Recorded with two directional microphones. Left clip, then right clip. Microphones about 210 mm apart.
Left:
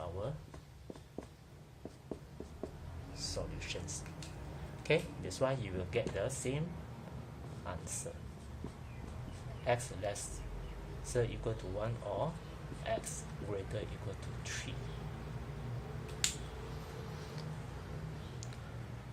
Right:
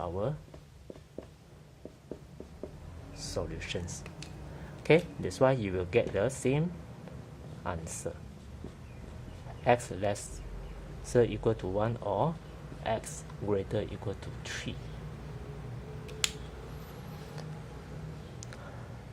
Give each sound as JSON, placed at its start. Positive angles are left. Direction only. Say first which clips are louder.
{"t": 3.2, "sound": "speech", "louder": "right 5 dB", "side_deg": -50}
{"t": 9.6, "sound": "speech", "louder": "right 8 dB", "side_deg": -50}